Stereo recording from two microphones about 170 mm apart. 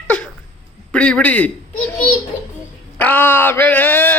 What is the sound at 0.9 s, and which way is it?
Speech, 5° left (ahead or behind).